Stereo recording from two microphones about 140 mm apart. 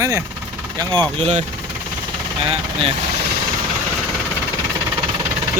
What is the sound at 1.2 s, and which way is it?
Speech, 50° right (ahead or behind).